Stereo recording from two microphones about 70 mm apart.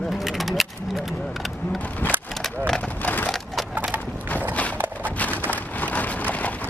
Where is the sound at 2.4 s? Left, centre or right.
Centre.